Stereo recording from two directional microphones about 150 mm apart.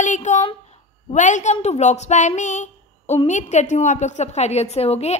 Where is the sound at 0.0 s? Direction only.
55° left (ahead or behind).